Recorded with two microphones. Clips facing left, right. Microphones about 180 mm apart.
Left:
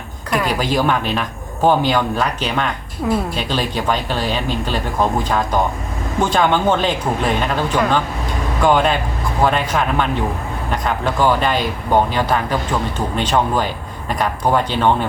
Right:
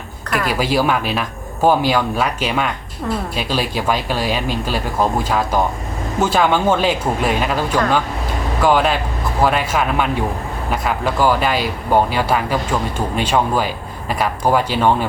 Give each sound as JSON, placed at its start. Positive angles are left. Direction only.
{"t": 0.4, "sound": "speech", "side_deg": -5}
{"t": 3.0, "sound": "a woman's voice", "side_deg": 10}
{"t": 3.3, "sound": "speech", "side_deg": -5}